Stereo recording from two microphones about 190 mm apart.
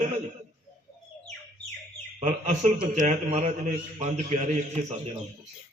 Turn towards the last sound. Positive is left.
turn(degrees=-40)  # may be behind; listen again after turning